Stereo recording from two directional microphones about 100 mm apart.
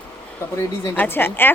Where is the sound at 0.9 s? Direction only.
20° left (ahead or behind).